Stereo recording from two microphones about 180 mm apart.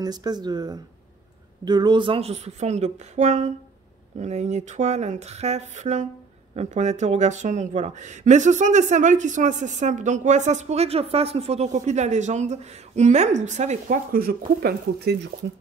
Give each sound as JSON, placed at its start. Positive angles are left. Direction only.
{"t": 0.0, "sound": "a woman's voice", "side_deg": -20}